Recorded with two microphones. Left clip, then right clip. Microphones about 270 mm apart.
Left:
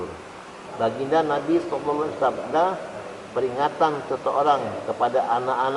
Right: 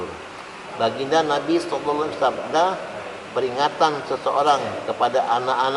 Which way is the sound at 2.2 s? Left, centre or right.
Centre.